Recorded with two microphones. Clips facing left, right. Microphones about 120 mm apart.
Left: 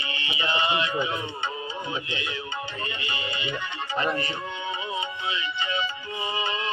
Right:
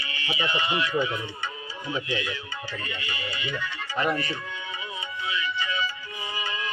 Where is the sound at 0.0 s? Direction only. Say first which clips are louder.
Left 2 dB; 25° left (ahead or behind).